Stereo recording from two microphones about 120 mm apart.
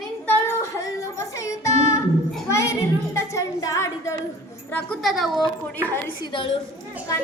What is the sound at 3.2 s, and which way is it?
Music, 25° left (ahead or behind).